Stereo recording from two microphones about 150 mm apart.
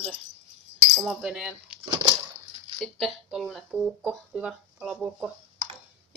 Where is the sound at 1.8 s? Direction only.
25° right (ahead or behind).